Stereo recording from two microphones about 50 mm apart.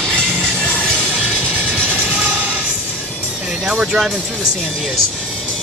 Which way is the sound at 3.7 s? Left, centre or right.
Right.